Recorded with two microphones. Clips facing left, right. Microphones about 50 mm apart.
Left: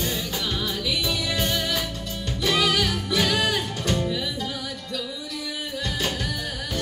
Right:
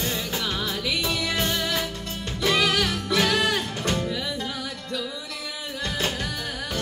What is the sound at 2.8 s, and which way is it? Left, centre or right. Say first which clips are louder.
Music: right 1 dB; right.